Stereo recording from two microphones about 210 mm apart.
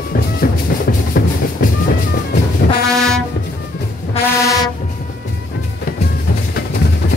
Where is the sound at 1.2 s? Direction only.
45° left (ahead or behind).